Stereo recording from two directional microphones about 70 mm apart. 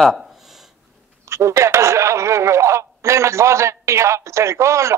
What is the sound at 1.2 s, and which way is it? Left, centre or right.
Speech, right.